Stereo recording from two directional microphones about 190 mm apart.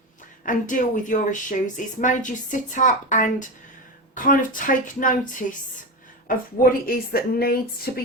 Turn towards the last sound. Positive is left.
turn(degrees=50)  # may be behind; listen again after turning